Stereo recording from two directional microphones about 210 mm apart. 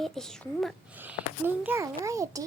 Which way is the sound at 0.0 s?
Centre (ahead or behind).